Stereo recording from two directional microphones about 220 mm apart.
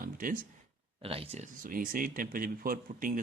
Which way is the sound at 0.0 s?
40° right (ahead or behind).